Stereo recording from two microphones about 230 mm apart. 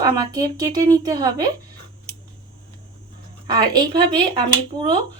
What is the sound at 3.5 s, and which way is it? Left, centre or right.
Speech, centre.